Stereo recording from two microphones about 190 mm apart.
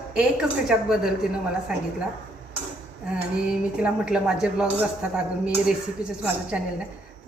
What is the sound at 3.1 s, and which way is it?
Speech, 5° right (ahead or behind).